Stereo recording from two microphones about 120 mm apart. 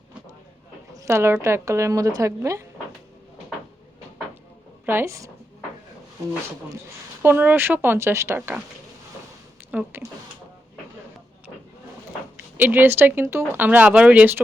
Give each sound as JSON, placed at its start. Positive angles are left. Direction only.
{"t": 0.9, "sound": "a woman's voice", "side_deg": -25}
{"t": 4.9, "sound": "a woman's voice", "side_deg": -20}
{"t": 7.2, "sound": "speech", "side_deg": -15}
{"t": 9.7, "sound": "speech", "side_deg": -20}
{"t": 12.5, "sound": "speech", "side_deg": -15}